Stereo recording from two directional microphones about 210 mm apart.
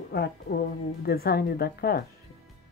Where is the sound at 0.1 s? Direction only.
50° left (ahead or behind).